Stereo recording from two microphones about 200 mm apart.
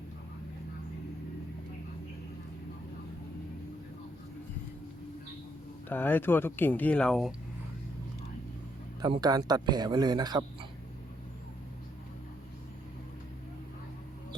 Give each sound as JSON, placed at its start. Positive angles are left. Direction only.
{"t": 5.9, "sound": "speech", "side_deg": 10}
{"t": 9.0, "sound": "speech", "side_deg": -20}